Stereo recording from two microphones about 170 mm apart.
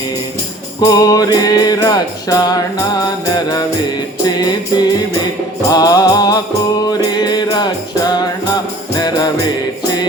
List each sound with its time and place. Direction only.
0.9 s music: 20° left (ahead or behind)